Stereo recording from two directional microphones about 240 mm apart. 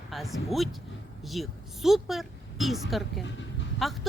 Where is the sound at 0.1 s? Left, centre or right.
Centre.